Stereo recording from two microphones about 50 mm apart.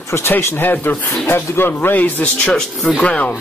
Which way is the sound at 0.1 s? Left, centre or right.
Left.